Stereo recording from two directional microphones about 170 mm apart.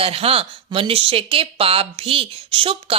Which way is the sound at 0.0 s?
35° right (ahead or behind).